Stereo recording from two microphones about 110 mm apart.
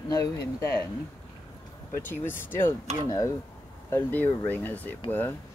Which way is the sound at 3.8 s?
15° left (ahead or behind).